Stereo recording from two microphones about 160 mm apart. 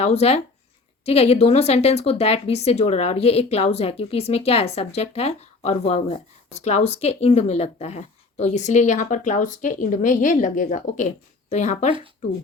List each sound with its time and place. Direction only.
0.0 s speech: 40° left (ahead or behind)
11.9 s speech: 30° right (ahead or behind)